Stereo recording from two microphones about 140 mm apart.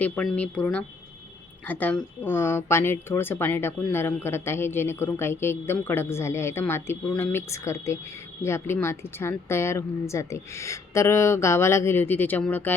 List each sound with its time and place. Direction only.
0.0 s a woman's voice: 10° left (ahead or behind)